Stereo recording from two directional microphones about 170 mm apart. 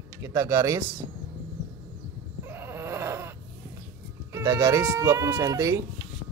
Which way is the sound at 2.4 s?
15° right (ahead or behind).